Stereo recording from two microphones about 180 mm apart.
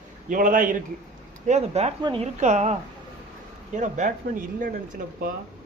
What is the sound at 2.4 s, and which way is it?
Speech, 40° right (ahead or behind).